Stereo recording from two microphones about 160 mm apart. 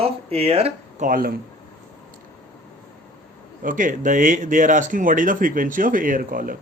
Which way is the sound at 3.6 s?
55° right (ahead or behind).